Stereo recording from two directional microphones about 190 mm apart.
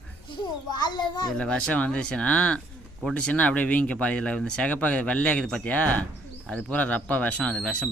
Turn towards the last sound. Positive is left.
turn(degrees=5)  # may be behind; listen again after turning